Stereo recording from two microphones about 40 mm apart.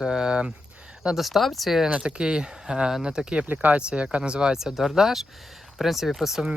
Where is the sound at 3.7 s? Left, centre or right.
Right.